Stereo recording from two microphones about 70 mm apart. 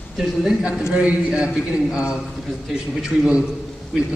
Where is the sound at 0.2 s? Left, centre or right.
Centre.